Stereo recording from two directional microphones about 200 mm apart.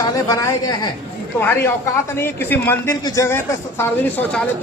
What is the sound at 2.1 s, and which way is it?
A man's voice, 10° left (ahead or behind).